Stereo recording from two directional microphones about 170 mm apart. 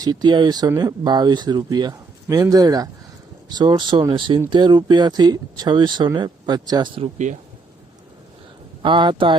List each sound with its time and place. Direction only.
0.0 s speech: 25° right (ahead or behind)
8.8 s speech: 30° right (ahead or behind)